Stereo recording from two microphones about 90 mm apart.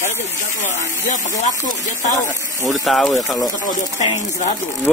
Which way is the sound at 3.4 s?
40° left (ahead or behind).